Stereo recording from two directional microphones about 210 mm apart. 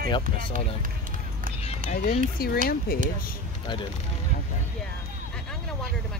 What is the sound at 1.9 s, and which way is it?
Speech, 35° left (ahead or behind).